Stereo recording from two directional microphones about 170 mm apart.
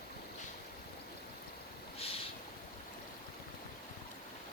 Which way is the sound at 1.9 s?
35° left (ahead or behind).